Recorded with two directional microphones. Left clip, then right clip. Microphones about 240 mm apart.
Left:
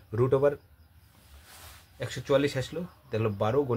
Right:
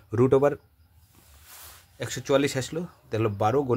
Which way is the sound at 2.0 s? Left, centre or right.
Right.